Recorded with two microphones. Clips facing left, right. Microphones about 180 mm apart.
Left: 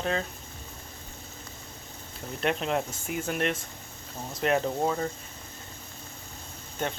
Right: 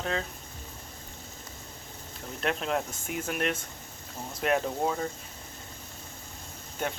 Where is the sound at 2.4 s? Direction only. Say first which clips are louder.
Left 2 dB; centre (ahead or behind).